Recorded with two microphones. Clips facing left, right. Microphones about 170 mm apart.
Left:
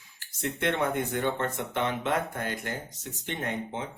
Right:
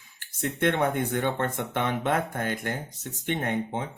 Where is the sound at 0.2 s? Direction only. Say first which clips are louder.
Right 4 dB; 55° right (ahead or behind).